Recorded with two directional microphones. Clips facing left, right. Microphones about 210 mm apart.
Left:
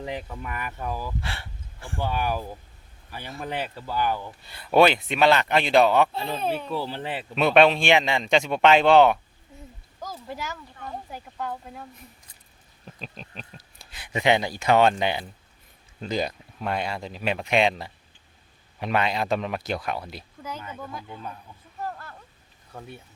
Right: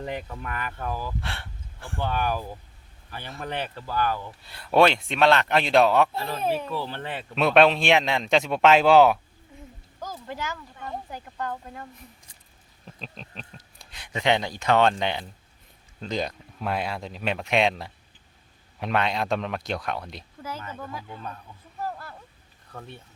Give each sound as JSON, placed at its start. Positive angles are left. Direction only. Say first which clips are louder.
{"t": 0.0, "sound": "speech", "louder": "even", "side_deg": 0}
{"t": 1.2, "sound": "a sound", "louder": "even", "side_deg": 0}
{"t": 2.0, "sound": "speech", "louder": "even", "side_deg": 10}
{"t": 4.3, "sound": "speech", "louder": "left 1 dB", "side_deg": 0}
{"t": 6.1, "sound": "speech", "louder": "left 1 dB", "side_deg": 20}
{"t": 6.4, "sound": "speech", "louder": "right 2 dB", "side_deg": -5}
{"t": 6.7, "sound": "speech", "louder": "left 2 dB", "side_deg": 15}
{"t": 7.3, "sound": "speech", "louder": "left 1 dB", "side_deg": 0}
{"t": 10.0, "sound": "speech", "louder": "right 1 dB", "side_deg": 10}
{"t": 13.0, "sound": "speech", "louder": "left 1 dB", "side_deg": 5}
{"t": 21.8, "sound": "a sound", "louder": "right 1 dB", "side_deg": -5}